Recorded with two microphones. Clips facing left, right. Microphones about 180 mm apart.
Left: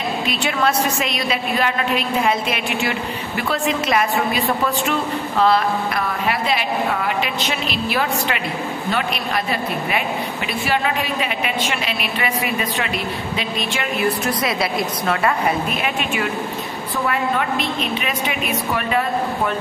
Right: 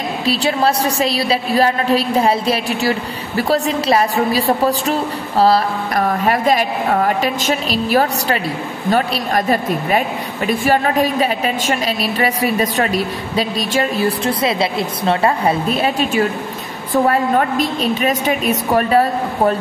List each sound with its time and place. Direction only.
0.2 s a woman's voice: 35° right (ahead or behind)